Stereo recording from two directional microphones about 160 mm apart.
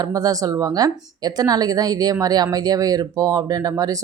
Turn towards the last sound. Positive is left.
turn(degrees=-20)  # may be behind; listen again after turning